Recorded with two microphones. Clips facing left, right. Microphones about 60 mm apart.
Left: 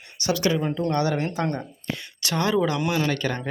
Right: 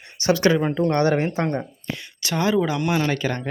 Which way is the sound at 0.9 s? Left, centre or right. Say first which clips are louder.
Right 5 dB; right.